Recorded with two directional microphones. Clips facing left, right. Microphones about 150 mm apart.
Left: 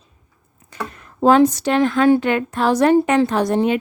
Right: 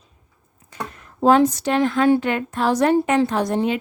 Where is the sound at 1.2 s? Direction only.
90° left.